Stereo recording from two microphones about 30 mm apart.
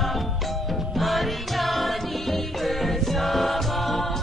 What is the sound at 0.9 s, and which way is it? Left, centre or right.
Music, centre.